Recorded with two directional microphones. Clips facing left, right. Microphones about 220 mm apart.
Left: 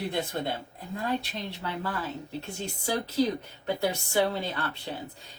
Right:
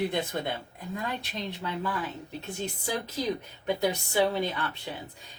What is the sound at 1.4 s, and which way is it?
A woman's voice, 15° right (ahead or behind).